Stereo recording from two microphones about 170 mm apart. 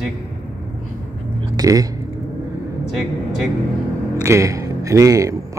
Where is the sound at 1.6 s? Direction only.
20° right (ahead or behind).